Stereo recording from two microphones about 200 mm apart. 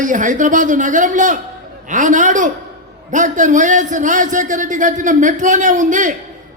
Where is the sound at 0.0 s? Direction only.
40° right (ahead or behind).